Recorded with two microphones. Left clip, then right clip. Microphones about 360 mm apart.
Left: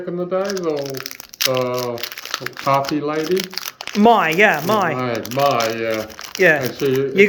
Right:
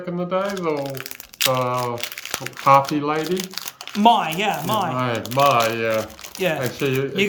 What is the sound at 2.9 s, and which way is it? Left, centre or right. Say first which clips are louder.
Speech: left 1 dB; right.